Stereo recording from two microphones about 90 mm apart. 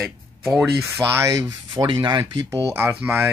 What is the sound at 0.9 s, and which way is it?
Speech, 25° right (ahead or behind).